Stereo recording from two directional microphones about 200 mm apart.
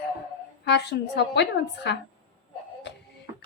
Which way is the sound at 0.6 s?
55° left (ahead or behind).